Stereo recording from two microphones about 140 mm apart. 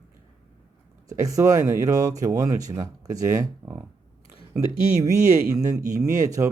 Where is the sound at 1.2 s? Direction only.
25° right (ahead or behind).